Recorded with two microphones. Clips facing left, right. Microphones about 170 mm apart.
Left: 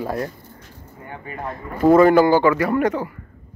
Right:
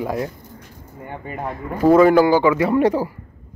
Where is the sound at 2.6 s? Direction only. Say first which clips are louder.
Right 3 dB; 25° right (ahead or behind).